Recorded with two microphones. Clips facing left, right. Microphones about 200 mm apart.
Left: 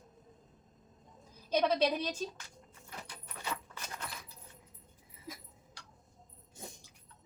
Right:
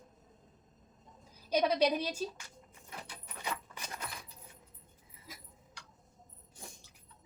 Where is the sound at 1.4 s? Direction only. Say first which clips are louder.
Right 1 dB; 10° right (ahead or behind).